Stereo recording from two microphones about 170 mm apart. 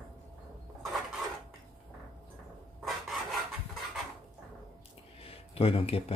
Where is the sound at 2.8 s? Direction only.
Centre (ahead or behind).